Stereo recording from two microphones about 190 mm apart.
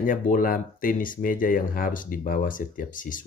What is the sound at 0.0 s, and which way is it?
Speech, 45° left (ahead or behind).